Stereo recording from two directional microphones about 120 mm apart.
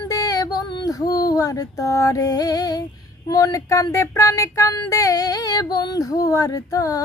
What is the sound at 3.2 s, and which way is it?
Speech, 30° left (ahead or behind).